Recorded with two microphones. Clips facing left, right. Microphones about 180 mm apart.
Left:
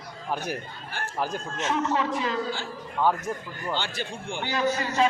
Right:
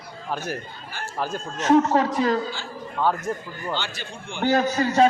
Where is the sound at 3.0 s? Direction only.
15° left (ahead or behind).